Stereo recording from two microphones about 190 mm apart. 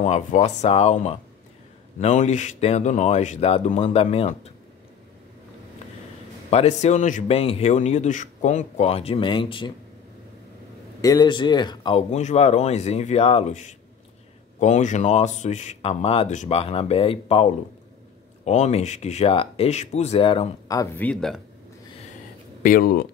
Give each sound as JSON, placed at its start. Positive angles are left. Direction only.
{"t": 0.0, "sound": "a man's voice", "side_deg": 35}
{"t": 6.5, "sound": "a man's voice", "side_deg": 35}
{"t": 11.0, "sound": "a man's voice", "side_deg": 20}
{"t": 20.6, "sound": "speech", "side_deg": 20}
{"t": 22.6, "sound": "speech", "side_deg": 50}